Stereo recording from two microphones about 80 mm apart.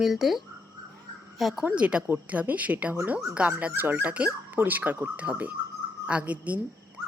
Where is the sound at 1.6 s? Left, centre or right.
Centre.